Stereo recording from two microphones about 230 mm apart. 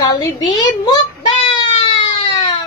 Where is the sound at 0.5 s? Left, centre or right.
Centre.